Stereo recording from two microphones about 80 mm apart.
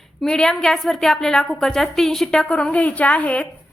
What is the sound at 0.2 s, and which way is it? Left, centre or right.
A woman's voice, centre.